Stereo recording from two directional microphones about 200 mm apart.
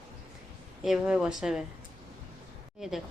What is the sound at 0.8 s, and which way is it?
Speech, 5° right (ahead or behind).